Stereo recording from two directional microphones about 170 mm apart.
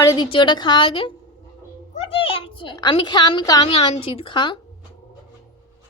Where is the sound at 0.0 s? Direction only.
25° left (ahead or behind).